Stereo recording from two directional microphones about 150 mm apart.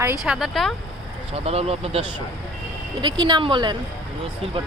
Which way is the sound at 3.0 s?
30° right (ahead or behind).